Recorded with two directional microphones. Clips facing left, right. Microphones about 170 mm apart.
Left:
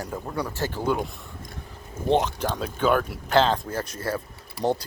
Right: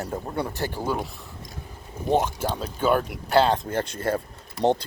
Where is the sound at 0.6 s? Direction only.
15° right (ahead or behind).